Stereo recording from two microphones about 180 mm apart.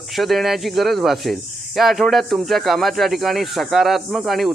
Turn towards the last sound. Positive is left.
turn(degrees=0)  # may be behind; listen again after turning